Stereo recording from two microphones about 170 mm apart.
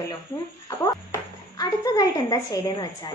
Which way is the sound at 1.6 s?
20° left (ahead or behind).